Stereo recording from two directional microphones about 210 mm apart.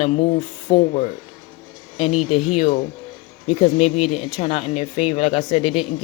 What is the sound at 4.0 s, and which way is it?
Speech, centre (ahead or behind).